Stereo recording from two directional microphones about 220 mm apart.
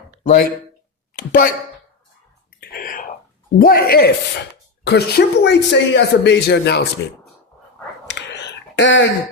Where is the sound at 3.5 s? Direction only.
40° left (ahead or behind).